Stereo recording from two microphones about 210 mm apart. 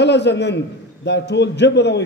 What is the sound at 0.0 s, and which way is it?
A man's voice, 55° left (ahead or behind).